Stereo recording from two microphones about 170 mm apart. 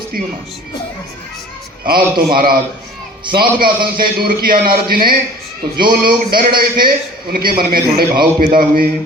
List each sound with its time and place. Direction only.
1.8 s a man's voice: 60° right (ahead or behind)